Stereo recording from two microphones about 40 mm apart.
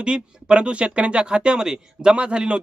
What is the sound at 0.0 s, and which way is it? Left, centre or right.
Speech, right.